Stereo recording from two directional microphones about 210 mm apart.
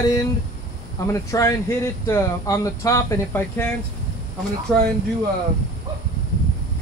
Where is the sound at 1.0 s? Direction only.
15° left (ahead or behind).